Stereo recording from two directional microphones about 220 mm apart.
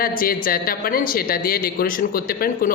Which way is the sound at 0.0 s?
40° left (ahead or behind).